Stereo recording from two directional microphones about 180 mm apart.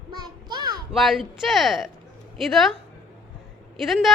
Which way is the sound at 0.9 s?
Centre (ahead or behind).